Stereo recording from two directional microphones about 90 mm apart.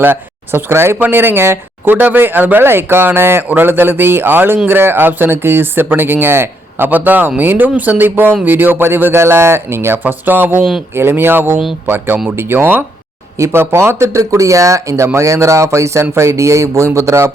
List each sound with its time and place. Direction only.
0.0 s speech: 25° right (ahead or behind)